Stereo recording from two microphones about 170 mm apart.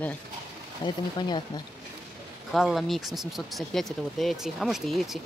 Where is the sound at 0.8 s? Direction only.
25° left (ahead or behind).